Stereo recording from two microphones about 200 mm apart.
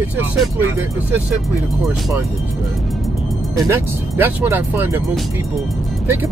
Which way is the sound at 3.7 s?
10° right (ahead or behind).